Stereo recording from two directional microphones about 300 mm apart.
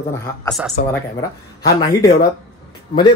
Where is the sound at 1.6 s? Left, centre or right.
Centre.